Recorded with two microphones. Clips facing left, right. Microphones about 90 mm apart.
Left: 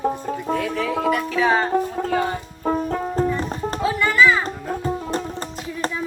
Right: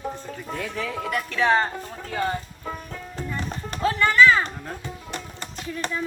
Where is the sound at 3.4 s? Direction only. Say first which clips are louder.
Left 7 dB; 40° left (ahead or behind).